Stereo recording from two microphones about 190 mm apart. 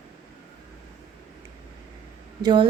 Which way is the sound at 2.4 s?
25° right (ahead or behind).